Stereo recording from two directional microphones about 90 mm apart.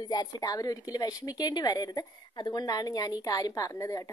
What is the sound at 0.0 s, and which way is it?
A woman's voice, 45° left (ahead or behind).